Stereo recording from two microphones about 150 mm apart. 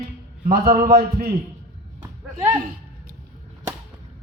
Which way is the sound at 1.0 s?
90° right.